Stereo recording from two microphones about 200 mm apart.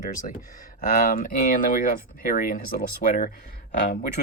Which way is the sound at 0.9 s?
40° left (ahead or behind).